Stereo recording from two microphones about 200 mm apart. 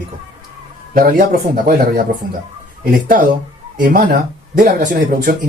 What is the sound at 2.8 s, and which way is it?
Speech, 45° right (ahead or behind).